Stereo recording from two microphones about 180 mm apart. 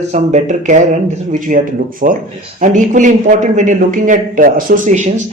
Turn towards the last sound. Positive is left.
turn(degrees=-45)  # may be behind; listen again after turning